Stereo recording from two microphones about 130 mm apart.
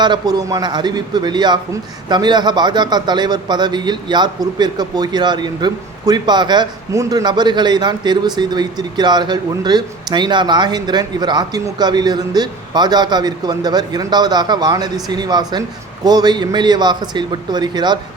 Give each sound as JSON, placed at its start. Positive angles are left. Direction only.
{"t": 0.0, "sound": "a man's voice", "side_deg": -35}